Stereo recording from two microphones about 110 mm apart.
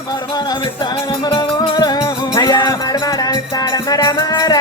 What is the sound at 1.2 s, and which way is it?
Music, 40° left (ahead or behind).